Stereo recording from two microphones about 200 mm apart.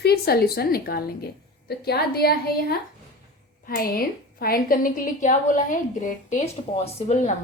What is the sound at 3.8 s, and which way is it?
A woman's voice, 50° left (ahead or behind).